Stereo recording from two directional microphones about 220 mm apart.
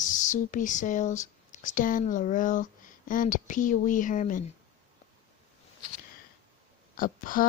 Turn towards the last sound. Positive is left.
turn(degrees=40)  # may be behind; listen again after turning